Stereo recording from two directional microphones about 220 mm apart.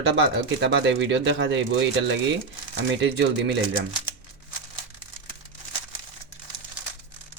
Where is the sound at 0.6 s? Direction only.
50° right (ahead or behind).